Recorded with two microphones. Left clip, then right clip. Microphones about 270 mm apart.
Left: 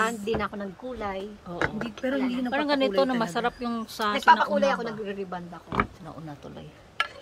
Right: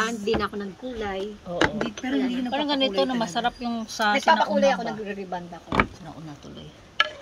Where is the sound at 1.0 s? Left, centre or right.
Centre.